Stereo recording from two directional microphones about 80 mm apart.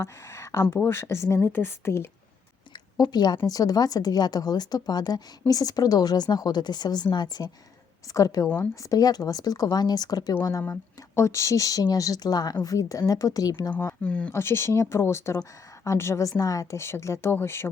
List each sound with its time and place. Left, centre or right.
0.0 s speech: left
3.0 s a woman's voice: left
8.1 s speech: left
10.6 s speech: left
13.5 s speech: left
14.0 s speech: centre
14.3 s speech: left
16.8 s speech: left